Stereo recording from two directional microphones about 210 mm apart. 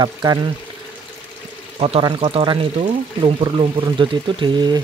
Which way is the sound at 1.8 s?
25° right (ahead or behind).